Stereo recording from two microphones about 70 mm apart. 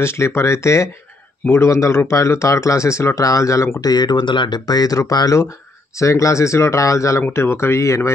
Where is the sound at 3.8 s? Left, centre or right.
Left.